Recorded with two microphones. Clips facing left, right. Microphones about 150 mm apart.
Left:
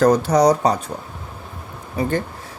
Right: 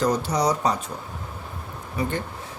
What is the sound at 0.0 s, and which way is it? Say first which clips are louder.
Speech: left 8 dB; 50° left (ahead or behind).